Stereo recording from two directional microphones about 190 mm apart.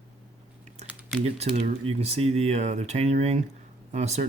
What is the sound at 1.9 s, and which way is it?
Speech, 35° right (ahead or behind).